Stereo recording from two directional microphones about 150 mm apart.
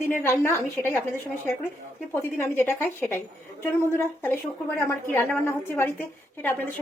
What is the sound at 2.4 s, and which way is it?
A woman's voice, 15° left (ahead or behind).